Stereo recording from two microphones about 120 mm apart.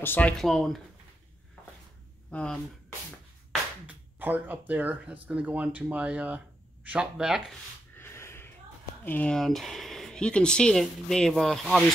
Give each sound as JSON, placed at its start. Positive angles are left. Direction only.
{"t": 0.0, "sound": "speech", "side_deg": 15}
{"t": 2.3, "sound": "speech", "side_deg": 5}
{"t": 3.8, "sound": "speech", "side_deg": -15}
{"t": 7.9, "sound": "a sound", "side_deg": 20}
{"t": 9.0, "sound": "speech", "side_deg": 15}